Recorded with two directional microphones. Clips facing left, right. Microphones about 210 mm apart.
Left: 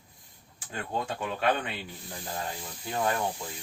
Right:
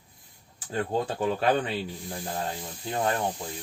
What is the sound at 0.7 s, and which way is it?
Speech, 35° right (ahead or behind).